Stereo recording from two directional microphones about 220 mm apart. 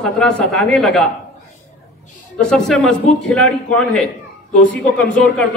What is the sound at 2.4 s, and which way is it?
A man's voice, 5° left (ahead or behind).